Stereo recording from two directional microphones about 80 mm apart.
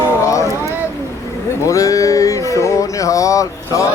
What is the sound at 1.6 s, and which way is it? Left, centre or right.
Speech, left.